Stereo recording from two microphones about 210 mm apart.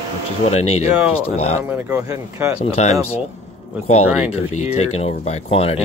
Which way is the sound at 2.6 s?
30° left (ahead or behind).